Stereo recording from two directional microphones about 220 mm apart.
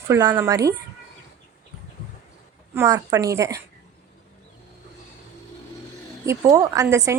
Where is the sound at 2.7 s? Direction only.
15° right (ahead or behind).